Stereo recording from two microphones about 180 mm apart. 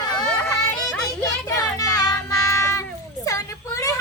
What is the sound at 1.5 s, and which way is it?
Child singing, 20° left (ahead or behind).